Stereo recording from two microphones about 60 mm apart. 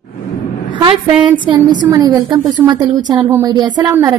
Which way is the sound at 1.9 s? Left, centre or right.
Right.